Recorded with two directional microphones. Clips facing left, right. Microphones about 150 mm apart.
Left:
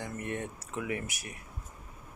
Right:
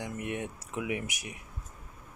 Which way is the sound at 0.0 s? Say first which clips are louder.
Right 1 dB; 15° right (ahead or behind).